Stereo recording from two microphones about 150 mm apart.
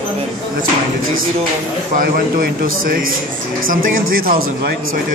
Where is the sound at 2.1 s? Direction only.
70° right (ahead or behind).